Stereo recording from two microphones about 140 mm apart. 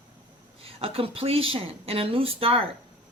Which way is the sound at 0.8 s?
45° right (ahead or behind).